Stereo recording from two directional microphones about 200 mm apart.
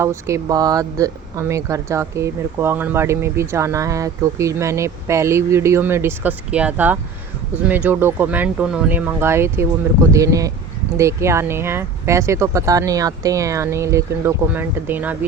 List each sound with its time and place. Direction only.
0.0 s speech: 15° right (ahead or behind)